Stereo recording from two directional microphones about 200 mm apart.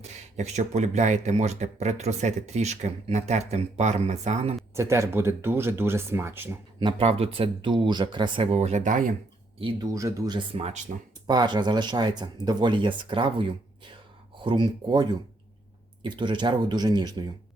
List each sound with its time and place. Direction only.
0.3 s speech: 35° right (ahead or behind)
4.7 s speech: 15° right (ahead or behind)
6.7 s speech: 25° right (ahead or behind)
9.6 s speech: 20° right (ahead or behind)